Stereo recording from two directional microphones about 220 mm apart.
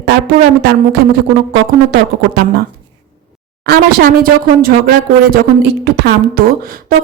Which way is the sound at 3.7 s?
45° right (ahead or behind).